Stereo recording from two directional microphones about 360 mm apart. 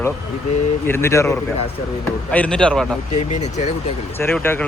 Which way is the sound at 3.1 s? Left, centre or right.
Centre.